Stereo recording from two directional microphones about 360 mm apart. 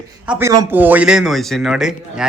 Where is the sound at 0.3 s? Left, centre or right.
Centre.